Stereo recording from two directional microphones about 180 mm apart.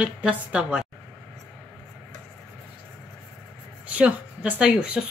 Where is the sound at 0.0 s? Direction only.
5° right (ahead or behind).